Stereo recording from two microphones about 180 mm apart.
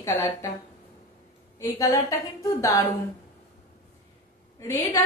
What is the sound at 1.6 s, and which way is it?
A woman's voice, 15° left (ahead or behind).